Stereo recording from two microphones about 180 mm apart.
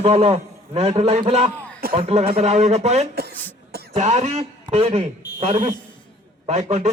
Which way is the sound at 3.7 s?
60° right (ahead or behind).